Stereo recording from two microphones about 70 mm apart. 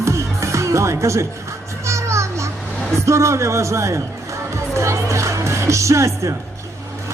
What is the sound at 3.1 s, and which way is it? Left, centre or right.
Speech, right.